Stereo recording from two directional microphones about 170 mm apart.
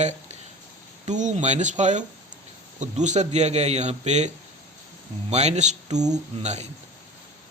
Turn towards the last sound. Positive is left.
turn(degrees=-40)  # may be behind; listen again after turning